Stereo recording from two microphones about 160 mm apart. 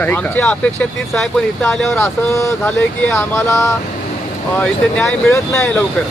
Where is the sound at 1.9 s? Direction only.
20° left (ahead or behind).